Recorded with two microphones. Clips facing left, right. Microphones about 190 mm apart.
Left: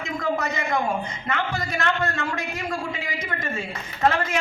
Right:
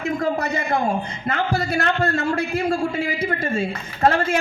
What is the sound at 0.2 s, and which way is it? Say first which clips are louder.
A woman's voice: right 3 dB; 35° right (ahead or behind).